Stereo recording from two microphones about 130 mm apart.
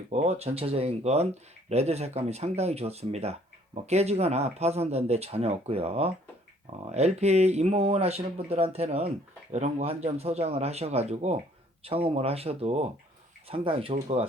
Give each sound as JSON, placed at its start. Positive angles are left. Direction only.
{"t": 0.1, "sound": "speech", "side_deg": -55}